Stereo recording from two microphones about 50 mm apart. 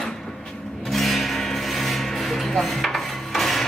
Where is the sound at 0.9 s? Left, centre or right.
Centre.